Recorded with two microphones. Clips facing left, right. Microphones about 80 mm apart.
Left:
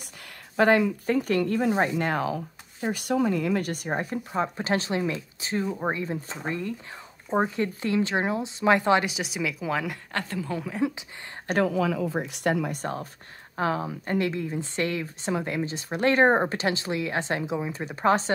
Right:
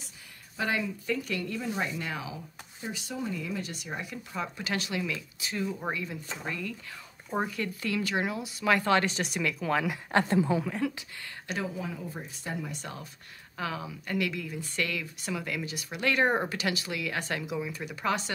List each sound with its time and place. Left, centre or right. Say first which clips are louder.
0.6 s speech: left 11 dB; left
9.0 s speech: left 1 dB; centre
10.1 s speech: right 8 dB; right
10.8 s speech: left 5 dB; left
11.6 s speech: left 11 dB; left
12.7 s a woman's voice: left 9 dB; left